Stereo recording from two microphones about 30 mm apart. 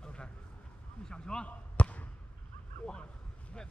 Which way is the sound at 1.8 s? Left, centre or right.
Left.